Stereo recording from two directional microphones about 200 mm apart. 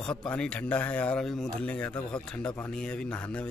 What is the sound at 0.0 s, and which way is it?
Speech, 5° left (ahead or behind).